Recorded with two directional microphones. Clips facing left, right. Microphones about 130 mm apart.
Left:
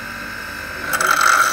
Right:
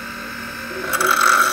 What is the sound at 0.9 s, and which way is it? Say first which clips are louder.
Mechanisms: even; 25° right (ahead or behind).